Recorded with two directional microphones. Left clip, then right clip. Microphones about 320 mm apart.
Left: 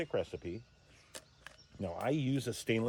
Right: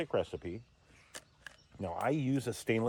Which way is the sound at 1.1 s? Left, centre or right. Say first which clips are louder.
Right 2 dB; centre.